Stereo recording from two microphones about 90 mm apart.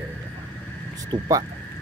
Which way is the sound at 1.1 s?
75° right (ahead or behind).